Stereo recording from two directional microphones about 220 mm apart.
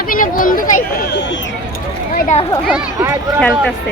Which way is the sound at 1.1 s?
55° left (ahead or behind).